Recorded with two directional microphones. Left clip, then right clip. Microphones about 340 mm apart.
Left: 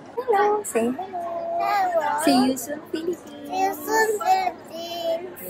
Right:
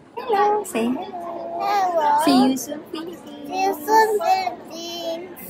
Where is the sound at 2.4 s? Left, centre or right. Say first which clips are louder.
Right 3 dB; right.